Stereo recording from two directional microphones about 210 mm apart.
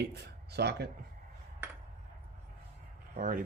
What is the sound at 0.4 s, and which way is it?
Speech, 50° right (ahead or behind).